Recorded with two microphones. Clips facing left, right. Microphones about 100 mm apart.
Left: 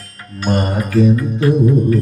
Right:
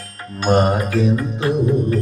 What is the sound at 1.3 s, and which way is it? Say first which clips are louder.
Music: left 4 dB; 25° right (ahead or behind).